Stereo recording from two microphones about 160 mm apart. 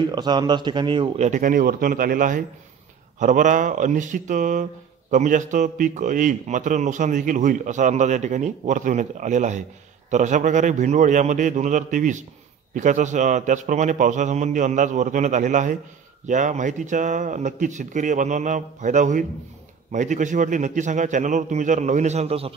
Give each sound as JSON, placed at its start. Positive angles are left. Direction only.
{"t": 0.1, "sound": "a man's voice", "side_deg": -25}